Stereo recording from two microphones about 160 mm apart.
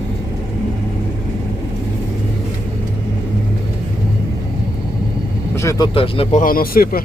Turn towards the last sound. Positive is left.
turn(degrees=65)  # may be behind; listen again after turning